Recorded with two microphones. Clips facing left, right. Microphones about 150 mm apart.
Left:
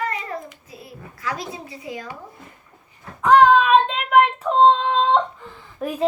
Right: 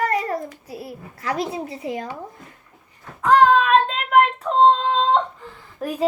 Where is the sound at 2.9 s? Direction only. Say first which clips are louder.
Left 2 dB; centre (ahead or behind).